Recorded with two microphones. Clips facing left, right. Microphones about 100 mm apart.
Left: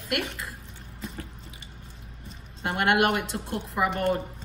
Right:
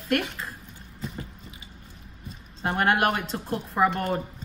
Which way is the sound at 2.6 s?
30° right (ahead or behind).